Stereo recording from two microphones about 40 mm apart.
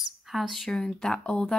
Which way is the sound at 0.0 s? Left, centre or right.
Centre.